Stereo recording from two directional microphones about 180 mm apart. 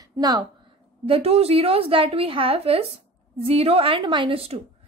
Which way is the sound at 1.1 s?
35° right (ahead or behind).